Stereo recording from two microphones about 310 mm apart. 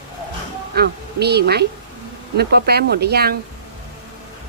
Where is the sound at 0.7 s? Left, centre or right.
Right.